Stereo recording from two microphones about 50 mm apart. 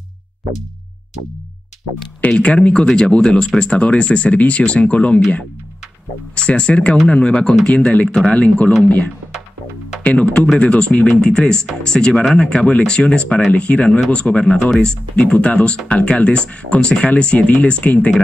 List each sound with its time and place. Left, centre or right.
2.2 s speech: left
6.3 s speech: left